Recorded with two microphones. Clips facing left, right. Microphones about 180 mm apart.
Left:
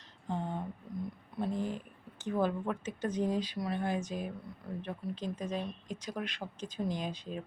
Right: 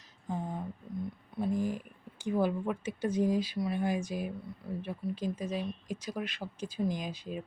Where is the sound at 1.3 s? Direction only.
Centre (ahead or behind).